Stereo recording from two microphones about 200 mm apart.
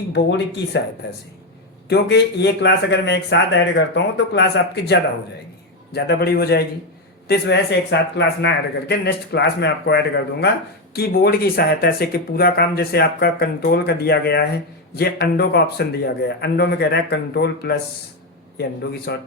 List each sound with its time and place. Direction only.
0.1 s a man's voice: 60° left (ahead or behind)
1.9 s a man's voice: 55° left (ahead or behind)